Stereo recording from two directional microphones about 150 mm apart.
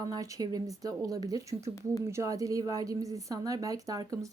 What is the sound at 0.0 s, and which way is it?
A woman's voice, 25° right (ahead or behind).